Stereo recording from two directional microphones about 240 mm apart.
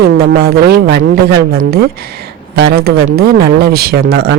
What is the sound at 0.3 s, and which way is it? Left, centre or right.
Speech, right.